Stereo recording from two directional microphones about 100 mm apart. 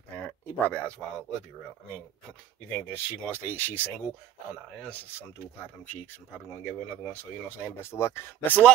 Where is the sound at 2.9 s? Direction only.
20° left (ahead or behind).